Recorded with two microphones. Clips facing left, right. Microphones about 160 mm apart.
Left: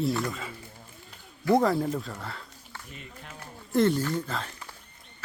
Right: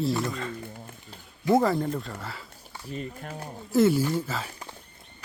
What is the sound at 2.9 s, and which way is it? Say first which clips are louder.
Speech: right 13 dB; 40° right (ahead or behind).